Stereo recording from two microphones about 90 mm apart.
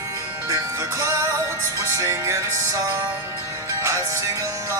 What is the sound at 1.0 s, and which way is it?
Music, 35° right (ahead or behind).